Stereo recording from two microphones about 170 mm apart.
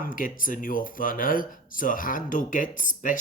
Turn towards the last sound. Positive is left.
turn(degrees=50)  # may be behind; listen again after turning